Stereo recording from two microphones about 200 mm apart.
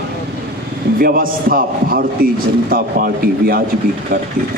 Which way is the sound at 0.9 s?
45° right (ahead or behind).